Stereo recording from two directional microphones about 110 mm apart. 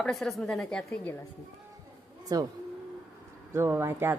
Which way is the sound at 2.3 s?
35° right (ahead or behind).